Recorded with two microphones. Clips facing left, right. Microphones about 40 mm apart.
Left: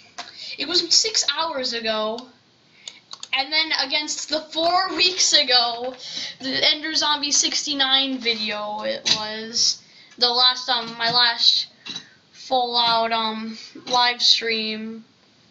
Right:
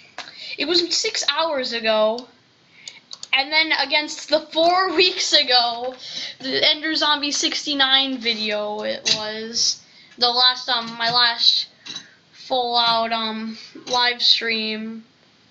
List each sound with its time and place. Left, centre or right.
0.1 s speech: right
2.8 s clicking: left
3.3 s a woman's voice: right